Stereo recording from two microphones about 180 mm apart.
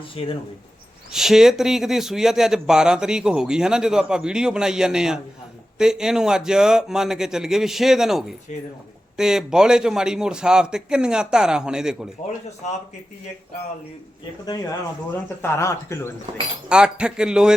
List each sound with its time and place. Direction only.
0.2 s speech: 30° left (ahead or behind)
1.1 s a man's voice: centre (ahead or behind)
15.4 s speech: 15° left (ahead or behind)
16.6 s a man's voice: 5° right (ahead or behind)